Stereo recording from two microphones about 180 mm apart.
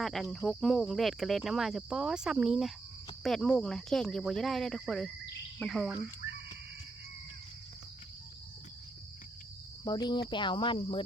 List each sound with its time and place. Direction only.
0.0 s speech: centre (ahead or behind)
9.8 s speech: 25° left (ahead or behind)